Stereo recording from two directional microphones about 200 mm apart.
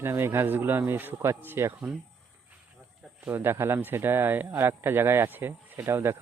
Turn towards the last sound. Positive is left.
turn(degrees=-10)  # may be behind; listen again after turning